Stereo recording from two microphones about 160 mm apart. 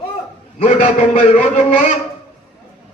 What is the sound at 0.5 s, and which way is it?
A man's voice, 45° left (ahead or behind).